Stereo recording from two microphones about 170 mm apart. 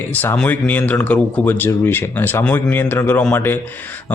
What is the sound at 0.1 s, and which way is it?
A man's voice, 10° left (ahead or behind).